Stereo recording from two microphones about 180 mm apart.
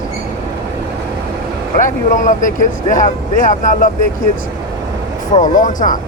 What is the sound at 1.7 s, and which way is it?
Speech, 45° left (ahead or behind).